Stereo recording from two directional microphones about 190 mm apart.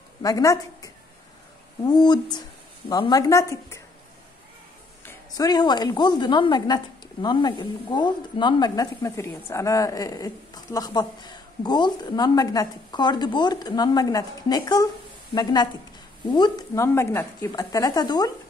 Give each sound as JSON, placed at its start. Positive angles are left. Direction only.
{"t": 0.2, "sound": "a woman's voice", "side_deg": 15}
{"t": 5.0, "sound": "a woman's voice", "side_deg": 20}